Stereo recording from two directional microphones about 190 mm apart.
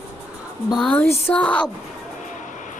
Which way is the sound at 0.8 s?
5° left (ahead or behind).